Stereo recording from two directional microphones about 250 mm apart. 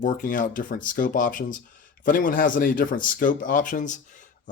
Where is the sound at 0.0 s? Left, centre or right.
Left.